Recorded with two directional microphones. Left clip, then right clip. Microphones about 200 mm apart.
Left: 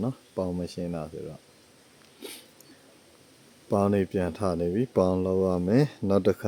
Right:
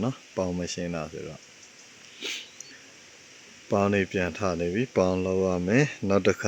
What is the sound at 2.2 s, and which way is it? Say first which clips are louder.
Dog: right 9 dB; 15° left (ahead or behind).